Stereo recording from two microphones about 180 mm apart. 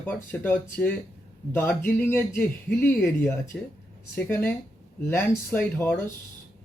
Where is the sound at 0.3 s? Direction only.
10° left (ahead or behind).